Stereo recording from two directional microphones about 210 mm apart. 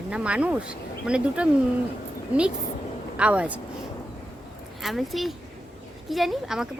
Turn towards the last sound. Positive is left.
turn(degrees=-5)  # may be behind; listen again after turning